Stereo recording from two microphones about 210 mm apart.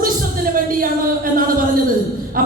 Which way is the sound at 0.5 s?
40° right (ahead or behind).